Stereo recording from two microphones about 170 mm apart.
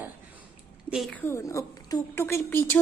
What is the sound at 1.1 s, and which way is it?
A woman's voice, 15° left (ahead or behind).